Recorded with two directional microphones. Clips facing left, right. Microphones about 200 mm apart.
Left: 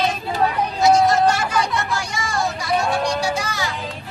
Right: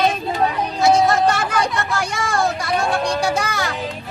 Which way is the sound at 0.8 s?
60° right (ahead or behind).